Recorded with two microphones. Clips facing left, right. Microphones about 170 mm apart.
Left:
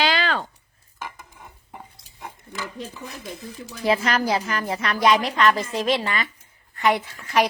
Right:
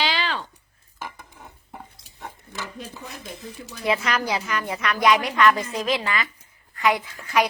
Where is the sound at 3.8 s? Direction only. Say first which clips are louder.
Left 3 dB; 30° left (ahead or behind).